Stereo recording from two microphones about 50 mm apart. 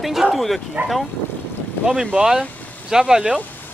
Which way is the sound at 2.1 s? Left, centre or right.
Centre.